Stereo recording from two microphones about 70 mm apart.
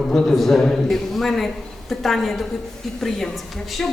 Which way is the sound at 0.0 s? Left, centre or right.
Centre.